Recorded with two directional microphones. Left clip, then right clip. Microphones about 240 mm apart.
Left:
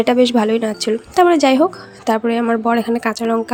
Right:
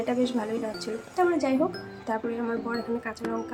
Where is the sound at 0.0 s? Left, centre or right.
Left.